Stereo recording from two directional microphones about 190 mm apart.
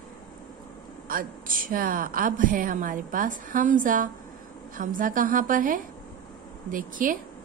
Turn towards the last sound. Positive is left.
turn(degrees=-45)  # may be behind; listen again after turning